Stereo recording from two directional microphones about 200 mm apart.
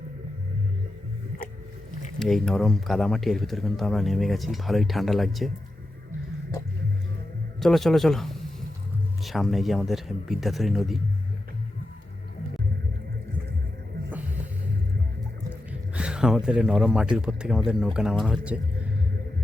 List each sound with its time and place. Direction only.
2.1 s speech: centre (ahead or behind)
7.6 s a man's voice: centre (ahead or behind)
16.0 s speech: 5° right (ahead or behind)